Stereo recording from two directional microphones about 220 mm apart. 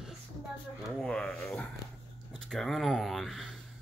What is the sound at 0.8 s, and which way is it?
Speech, centre (ahead or behind).